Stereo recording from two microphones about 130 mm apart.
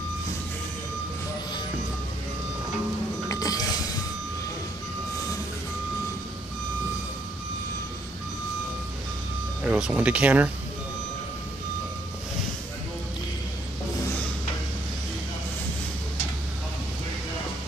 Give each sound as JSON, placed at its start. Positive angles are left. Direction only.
{"t": 3.3, "sound": "music", "side_deg": 30}
{"t": 9.6, "sound": "speech", "side_deg": -5}